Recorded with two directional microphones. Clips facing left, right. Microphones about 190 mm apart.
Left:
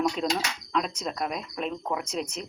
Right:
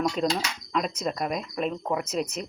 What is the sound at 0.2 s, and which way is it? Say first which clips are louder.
Speech: right 2 dB; centre (ahead or behind).